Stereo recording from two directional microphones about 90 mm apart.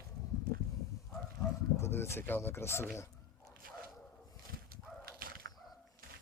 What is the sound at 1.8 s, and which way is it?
Speech, 30° left (ahead or behind).